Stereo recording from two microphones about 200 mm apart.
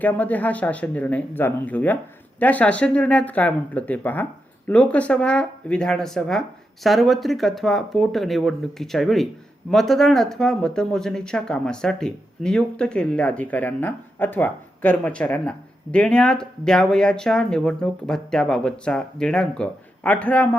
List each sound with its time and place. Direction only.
0.0 s speech: 10° left (ahead or behind)